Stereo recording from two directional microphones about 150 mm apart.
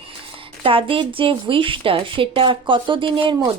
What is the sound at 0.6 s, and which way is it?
Speech, 35° right (ahead or behind).